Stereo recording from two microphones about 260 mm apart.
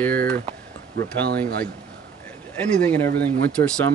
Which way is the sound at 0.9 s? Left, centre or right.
Right.